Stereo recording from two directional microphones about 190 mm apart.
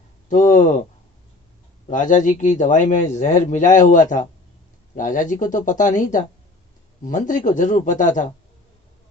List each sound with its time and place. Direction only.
0.3 s a man's voice: 40° left (ahead or behind)
1.9 s a man's voice: 45° left (ahead or behind)